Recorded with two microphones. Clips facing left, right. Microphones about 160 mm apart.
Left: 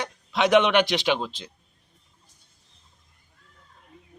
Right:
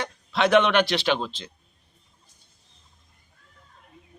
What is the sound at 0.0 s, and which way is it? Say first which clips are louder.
Speech: even; 15° left (ahead or behind).